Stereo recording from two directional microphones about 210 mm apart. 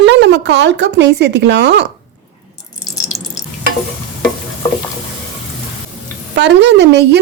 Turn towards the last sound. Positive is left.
turn(degrees=-55)  # may be behind; listen again after turning